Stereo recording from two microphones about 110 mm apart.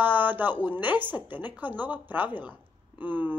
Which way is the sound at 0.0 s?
15° right (ahead or behind).